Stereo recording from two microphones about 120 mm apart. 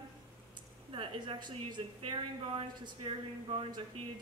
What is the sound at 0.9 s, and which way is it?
A woman's voice, 45° right (ahead or behind).